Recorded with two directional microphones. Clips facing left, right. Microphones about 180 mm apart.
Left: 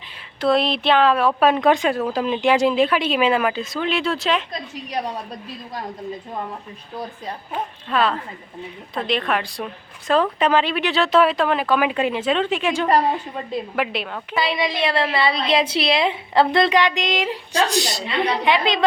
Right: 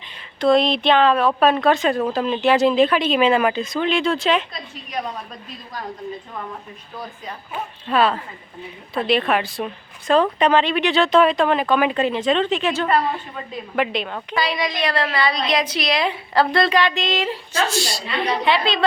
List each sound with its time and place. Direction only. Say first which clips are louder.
0.3 s speech: right 3 dB; 5° left (ahead or behind)
7.5 s speech: right 2 dB; 5° right (ahead or behind)
14.3 s a woman's voice: left 1 dB; 25° left (ahead or behind)